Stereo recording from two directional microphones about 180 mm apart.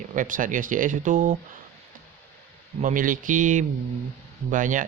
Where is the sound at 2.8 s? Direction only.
45° right (ahead or behind).